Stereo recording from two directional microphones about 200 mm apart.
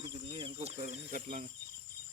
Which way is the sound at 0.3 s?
30° right (ahead or behind).